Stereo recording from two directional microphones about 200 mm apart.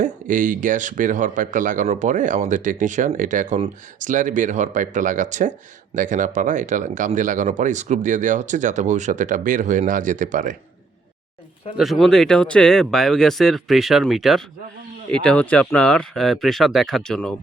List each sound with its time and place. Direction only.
0.0 s speech: 40° right (ahead or behind)
11.8 s speech: centre (ahead or behind)